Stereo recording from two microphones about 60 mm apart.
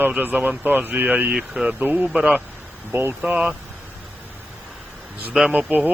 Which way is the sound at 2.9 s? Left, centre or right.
Right.